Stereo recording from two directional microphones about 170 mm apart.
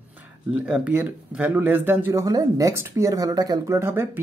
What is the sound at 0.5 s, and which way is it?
Speech, 5° right (ahead or behind).